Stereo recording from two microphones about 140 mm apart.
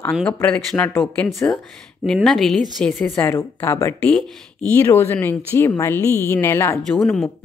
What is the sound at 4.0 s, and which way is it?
Speech, 10° left (ahead or behind).